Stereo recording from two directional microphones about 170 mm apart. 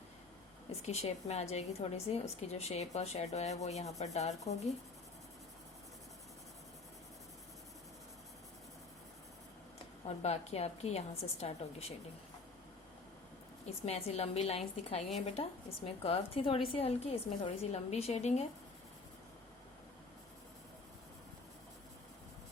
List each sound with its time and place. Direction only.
0.8 s a woman's voice: 40° left (ahead or behind)
10.1 s a woman's voice: 40° left (ahead or behind)
13.8 s a woman's voice: 40° left (ahead or behind)